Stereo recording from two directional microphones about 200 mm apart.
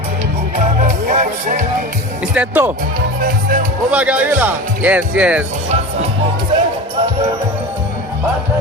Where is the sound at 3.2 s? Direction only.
45° right (ahead or behind).